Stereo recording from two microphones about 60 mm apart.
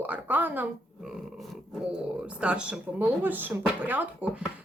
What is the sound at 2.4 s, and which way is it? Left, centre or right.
Speech, centre.